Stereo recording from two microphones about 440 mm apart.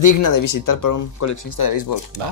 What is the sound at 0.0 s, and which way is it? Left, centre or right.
Speech, left.